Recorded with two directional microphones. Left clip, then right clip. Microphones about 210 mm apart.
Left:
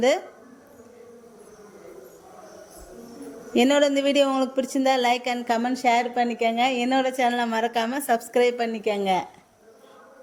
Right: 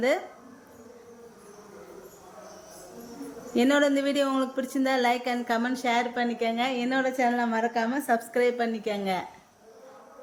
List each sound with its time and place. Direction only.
3.5 s speech: 25° left (ahead or behind)